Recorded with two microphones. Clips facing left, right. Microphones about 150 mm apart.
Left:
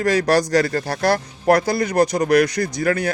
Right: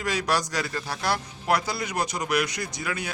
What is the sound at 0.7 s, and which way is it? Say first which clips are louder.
Speech: left 9 dB; 60° left (ahead or behind).